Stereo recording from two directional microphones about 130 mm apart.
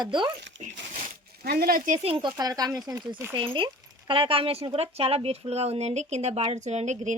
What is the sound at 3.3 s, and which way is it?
A woman's voice, 40° right (ahead or behind).